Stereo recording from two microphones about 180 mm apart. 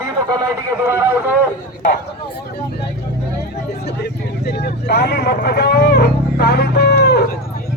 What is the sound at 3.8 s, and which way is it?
Vehicle, 65° left (ahead or behind).